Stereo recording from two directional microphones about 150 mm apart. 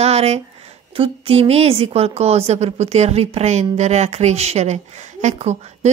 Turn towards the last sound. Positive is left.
turn(degrees=-50)  # may be behind; listen again after turning